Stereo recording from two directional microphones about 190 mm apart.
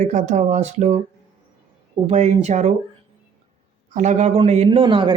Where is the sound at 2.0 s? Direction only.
35° right (ahead or behind).